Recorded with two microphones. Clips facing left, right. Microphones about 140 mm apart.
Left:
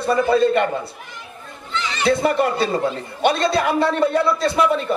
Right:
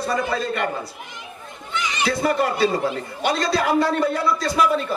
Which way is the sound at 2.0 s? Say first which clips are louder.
Left 3 dB; 25° left (ahead or behind).